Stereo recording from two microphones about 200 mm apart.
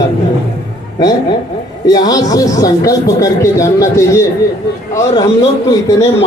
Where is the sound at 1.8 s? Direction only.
20° left (ahead or behind).